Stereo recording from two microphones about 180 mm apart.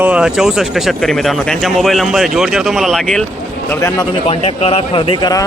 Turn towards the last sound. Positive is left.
turn(degrees=20)  # may be behind; listen again after turning